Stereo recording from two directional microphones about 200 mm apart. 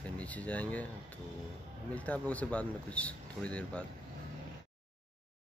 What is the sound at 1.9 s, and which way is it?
Speech, 5° left (ahead or behind).